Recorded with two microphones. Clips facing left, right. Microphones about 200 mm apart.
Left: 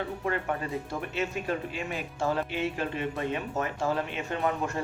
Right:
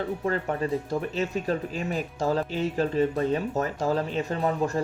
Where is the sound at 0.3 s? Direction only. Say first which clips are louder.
Right 4 dB; 35° right (ahead or behind).